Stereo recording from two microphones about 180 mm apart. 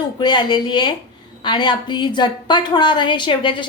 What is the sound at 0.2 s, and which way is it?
A woman's voice, 25° left (ahead or behind).